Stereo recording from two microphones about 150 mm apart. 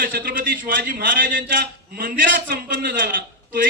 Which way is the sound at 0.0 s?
75° right (ahead or behind).